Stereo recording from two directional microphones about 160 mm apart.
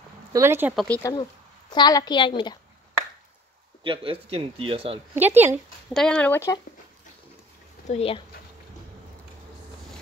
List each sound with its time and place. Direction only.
0.3 s speech: 15° right (ahead or behind)
1.0 s a woman's voice: 20° left (ahead or behind)
3.8 s speech: 35° right (ahead or behind)
5.1 s speech: 10° right (ahead or behind)
5.9 s speech: 5° left (ahead or behind)
7.8 s speech: 40° left (ahead or behind)